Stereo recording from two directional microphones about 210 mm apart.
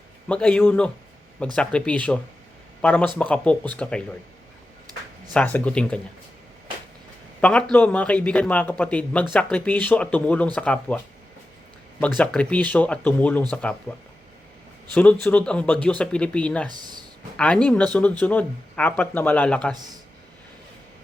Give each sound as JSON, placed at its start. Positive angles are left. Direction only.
{"t": 0.3, "sound": "a man's voice", "side_deg": 5}
{"t": 5.3, "sound": "a man's voice", "side_deg": 5}
{"t": 7.4, "sound": "a man's voice", "side_deg": 5}
{"t": 14.9, "sound": "a man's voice", "side_deg": 5}
{"t": 16.6, "sound": "speech", "side_deg": -20}
{"t": 17.3, "sound": "a man's voice", "side_deg": 5}